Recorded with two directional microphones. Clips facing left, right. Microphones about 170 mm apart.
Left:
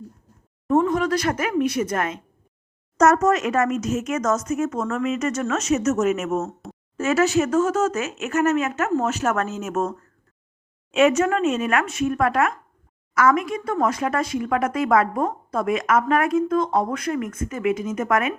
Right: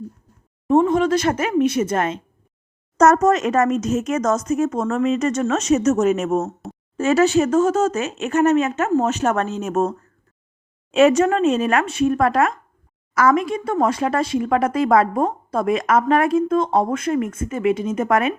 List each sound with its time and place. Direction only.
0.7 s speech: 25° right (ahead or behind)
3.0 s speech: 40° right (ahead or behind)
10.9 s speech: 35° right (ahead or behind)